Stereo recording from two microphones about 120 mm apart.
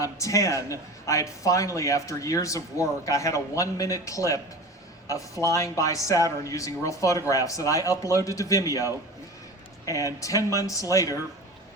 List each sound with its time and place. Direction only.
0.0 s a man's voice: 25° left (ahead or behind)